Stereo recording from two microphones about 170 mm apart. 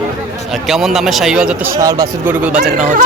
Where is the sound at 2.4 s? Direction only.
5° right (ahead or behind).